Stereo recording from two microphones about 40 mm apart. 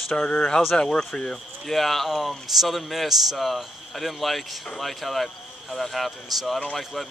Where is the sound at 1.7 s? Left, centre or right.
Centre.